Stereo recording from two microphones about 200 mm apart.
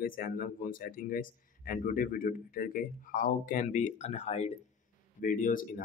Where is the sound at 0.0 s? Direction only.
45° left (ahead or behind).